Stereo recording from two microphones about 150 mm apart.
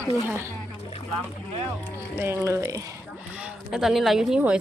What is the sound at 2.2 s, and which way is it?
Speech, 15° right (ahead or behind).